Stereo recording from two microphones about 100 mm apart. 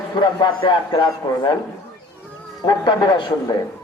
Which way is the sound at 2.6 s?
45° left (ahead or behind).